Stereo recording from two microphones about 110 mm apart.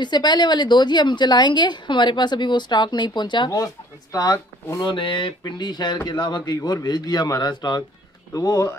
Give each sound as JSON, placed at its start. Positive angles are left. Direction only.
{"t": 0.0, "sound": "a woman's voice", "side_deg": 40}
{"t": 4.8, "sound": "a woman's voice", "side_deg": 50}